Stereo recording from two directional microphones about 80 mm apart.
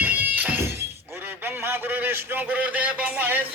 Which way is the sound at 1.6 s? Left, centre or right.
Right.